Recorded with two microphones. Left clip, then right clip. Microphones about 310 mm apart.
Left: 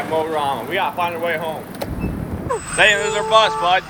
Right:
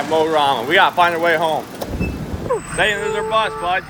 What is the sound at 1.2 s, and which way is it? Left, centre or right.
Speech, right.